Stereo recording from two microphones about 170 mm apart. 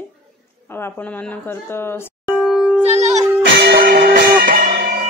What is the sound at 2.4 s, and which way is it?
Music, centre (ahead or behind).